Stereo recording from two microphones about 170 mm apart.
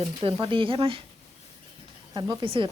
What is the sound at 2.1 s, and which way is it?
Speech, 25° right (ahead or behind).